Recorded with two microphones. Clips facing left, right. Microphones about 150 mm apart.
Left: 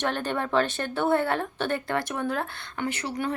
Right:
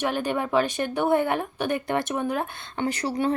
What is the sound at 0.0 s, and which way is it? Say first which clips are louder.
A woman's voice: right 2 dB; 10° right (ahead or behind).